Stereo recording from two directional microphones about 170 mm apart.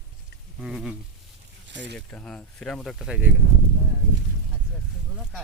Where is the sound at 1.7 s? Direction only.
90° right.